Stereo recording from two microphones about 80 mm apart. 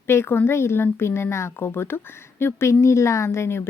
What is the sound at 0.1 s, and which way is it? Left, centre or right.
A woman's voice, left.